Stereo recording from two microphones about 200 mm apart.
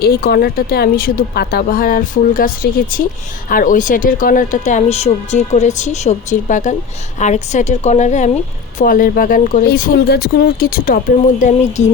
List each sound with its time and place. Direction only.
0.0 s speech: 50° left (ahead or behind)